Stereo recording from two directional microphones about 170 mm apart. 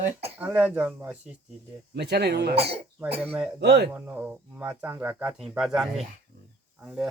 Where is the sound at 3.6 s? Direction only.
80° right.